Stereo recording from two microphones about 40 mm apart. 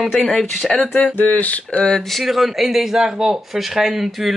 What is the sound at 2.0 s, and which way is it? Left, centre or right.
Speech, centre.